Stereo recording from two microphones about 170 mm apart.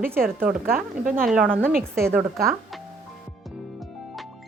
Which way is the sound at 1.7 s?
60° right (ahead or behind).